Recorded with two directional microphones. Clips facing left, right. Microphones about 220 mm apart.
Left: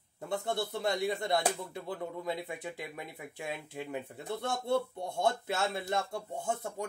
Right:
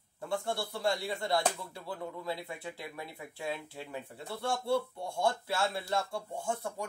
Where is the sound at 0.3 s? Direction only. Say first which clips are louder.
Left 1 dB; 20° left (ahead or behind).